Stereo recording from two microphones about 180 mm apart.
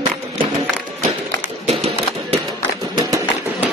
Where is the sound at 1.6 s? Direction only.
35° right (ahead or behind).